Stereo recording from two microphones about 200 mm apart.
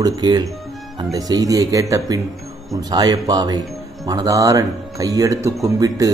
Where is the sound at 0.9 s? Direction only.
20° right (ahead or behind).